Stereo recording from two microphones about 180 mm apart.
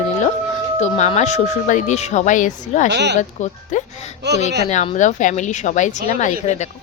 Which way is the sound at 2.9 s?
70° right (ahead or behind).